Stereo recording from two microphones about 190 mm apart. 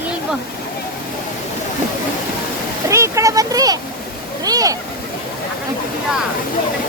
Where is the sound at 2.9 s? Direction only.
15° right (ahead or behind).